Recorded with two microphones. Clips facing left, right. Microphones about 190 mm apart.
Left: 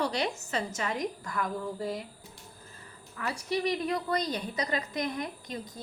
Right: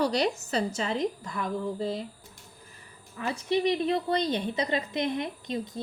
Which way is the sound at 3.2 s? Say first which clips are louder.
Right 4 dB; 20° right (ahead or behind).